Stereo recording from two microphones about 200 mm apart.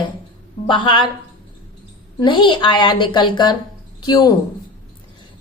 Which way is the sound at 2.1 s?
25° left (ahead or behind).